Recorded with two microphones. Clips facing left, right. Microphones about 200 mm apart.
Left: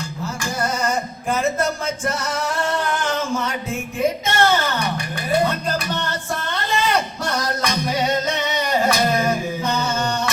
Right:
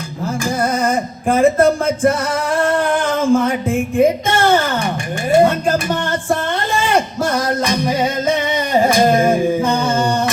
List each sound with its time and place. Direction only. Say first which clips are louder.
0.4 s music: right 5 dB; 55° right (ahead or behind)
5.3 s a sound: right 8 dB; 50° right (ahead or behind)
8.8 s singing: right 8 dB; 50° right (ahead or behind)